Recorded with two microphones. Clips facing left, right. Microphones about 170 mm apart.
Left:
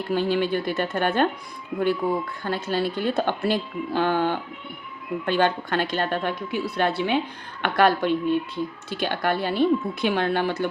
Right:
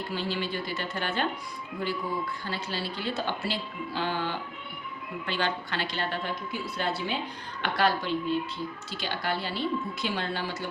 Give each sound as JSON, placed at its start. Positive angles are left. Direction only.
{"t": 0.1, "sound": "a woman's voice", "side_deg": 55}